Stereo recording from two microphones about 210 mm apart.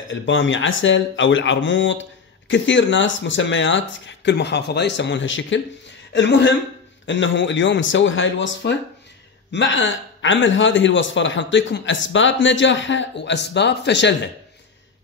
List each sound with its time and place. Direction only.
0.1 s speech: 65° left (ahead or behind)